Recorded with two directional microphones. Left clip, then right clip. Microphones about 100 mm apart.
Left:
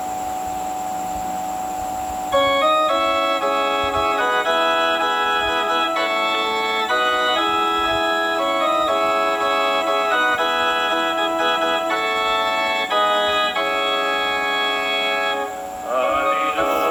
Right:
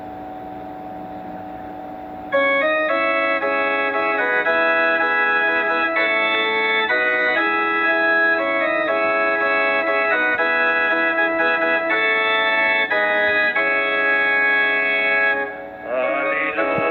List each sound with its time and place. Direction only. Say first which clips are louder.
2.3 s music: left 1 dB; 40° left (ahead or behind)